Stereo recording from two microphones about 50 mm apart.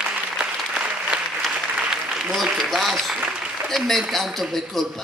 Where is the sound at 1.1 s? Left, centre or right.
Centre.